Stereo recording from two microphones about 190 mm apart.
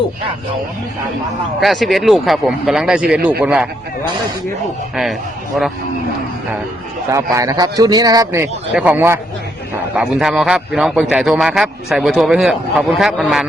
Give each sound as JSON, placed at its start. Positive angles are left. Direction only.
{"t": 1.6, "sound": "a man's voice", "side_deg": 0}
{"t": 5.5, "sound": "a man's voice", "side_deg": 0}
{"t": 7.1, "sound": "a man's voice", "side_deg": -15}